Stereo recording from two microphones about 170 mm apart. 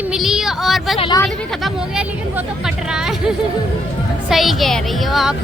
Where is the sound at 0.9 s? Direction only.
30° left (ahead or behind).